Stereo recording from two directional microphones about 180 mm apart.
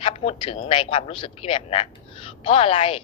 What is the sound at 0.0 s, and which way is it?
A woman's voice, 35° left (ahead or behind).